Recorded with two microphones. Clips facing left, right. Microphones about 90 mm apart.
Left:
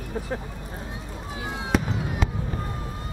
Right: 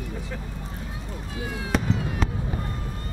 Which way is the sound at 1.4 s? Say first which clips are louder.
Right 1 dB; 25° left (ahead or behind).